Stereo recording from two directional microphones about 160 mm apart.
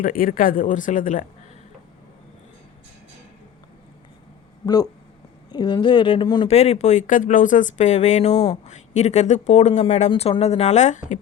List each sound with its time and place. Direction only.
0.0 s speech: 60° left (ahead or behind)
4.6 s speech: 25° left (ahead or behind)
6.5 s speech: 40° left (ahead or behind)
10.1 s speech: 35° left (ahead or behind)